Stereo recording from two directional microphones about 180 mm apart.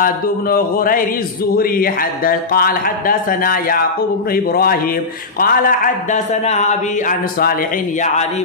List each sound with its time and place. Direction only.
0.0 s speech: 55° left (ahead or behind)